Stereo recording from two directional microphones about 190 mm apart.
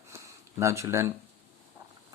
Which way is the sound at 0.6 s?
15° right (ahead or behind).